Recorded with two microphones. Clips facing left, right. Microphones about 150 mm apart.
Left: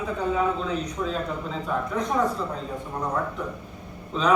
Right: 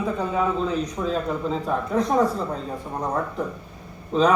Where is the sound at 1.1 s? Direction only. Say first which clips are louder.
Right 5 dB; 35° right (ahead or behind).